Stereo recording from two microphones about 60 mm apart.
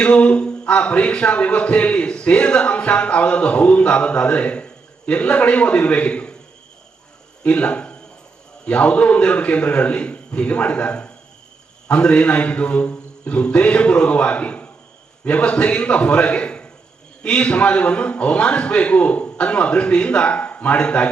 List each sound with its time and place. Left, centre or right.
0.0 s a man's voice: centre
7.4 s a man's voice: left